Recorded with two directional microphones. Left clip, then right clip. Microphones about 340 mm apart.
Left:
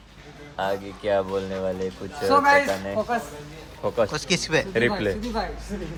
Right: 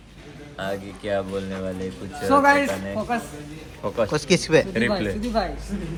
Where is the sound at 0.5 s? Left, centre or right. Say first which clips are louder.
Left 3 dB; left.